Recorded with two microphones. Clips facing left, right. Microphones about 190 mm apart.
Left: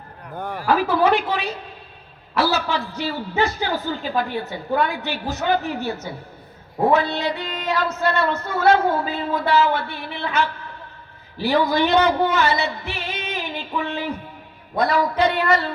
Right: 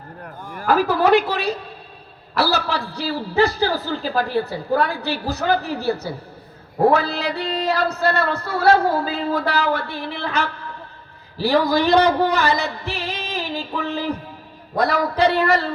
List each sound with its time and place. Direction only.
0.6 s speech: 40° right (ahead or behind)
2.4 s a sound: 35° right (ahead or behind)
2.9 s speech: 35° right (ahead or behind)